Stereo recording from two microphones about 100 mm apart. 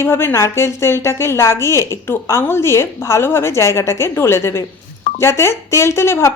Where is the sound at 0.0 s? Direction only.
25° left (ahead or behind).